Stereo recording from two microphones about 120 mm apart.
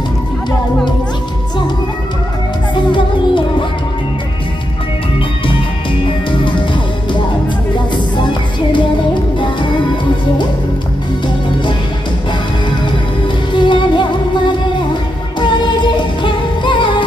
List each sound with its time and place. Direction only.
2.7 s music: 40° left (ahead or behind)
6.3 s music: 45° left (ahead or behind)
13.5 s music: 45° left (ahead or behind)